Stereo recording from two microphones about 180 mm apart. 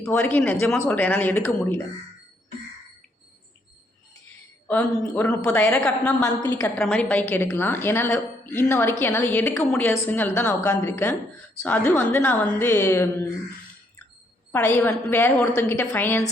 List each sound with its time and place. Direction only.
0.0 s a woman's voice: 10° left (ahead or behind)
4.7 s a woman's voice: 10° left (ahead or behind)
6.2 s a woman's voice: 15° left (ahead or behind)
14.5 s a woman's voice: 10° left (ahead or behind)